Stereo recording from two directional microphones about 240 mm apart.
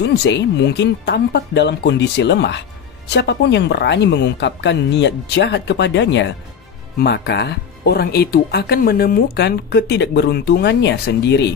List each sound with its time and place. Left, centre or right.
0.0 s speech: left